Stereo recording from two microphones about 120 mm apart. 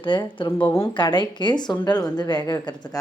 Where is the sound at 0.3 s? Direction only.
45° left (ahead or behind).